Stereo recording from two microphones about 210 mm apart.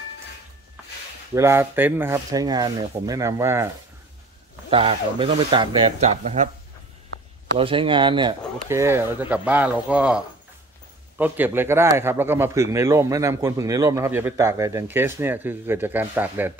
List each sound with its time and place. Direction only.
1.3 s a man's voice: 10° right (ahead or behind)
4.6 s speech: 25° right (ahead or behind)
7.5 s a man's voice: 25° right (ahead or behind); by 16.5 s 10° right (ahead or behind)